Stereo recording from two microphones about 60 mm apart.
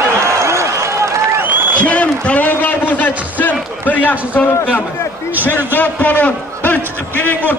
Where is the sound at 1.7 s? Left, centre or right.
Left.